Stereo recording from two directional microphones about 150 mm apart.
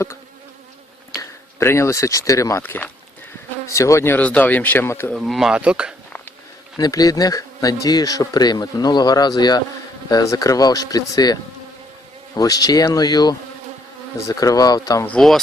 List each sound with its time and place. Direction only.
1.5 s speech: 20° left (ahead or behind)
5.1 s speech: centre (ahead or behind)
6.7 s speech: 25° left (ahead or behind)
12.4 s speech: 25° left (ahead or behind)
15.0 s speech: 5° left (ahead or behind)